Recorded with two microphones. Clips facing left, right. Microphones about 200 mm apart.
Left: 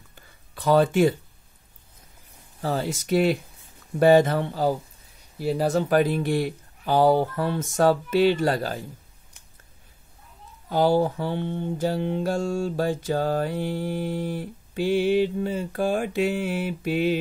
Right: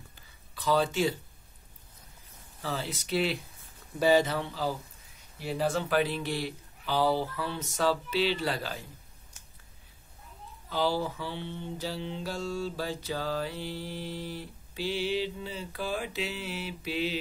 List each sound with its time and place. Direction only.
0.1 s a sound: 55° left (ahead or behind)
2.6 s mantra: 45° left (ahead or behind)
5.4 s mantra: 40° left (ahead or behind)
10.7 s mantra: 50° left (ahead or behind)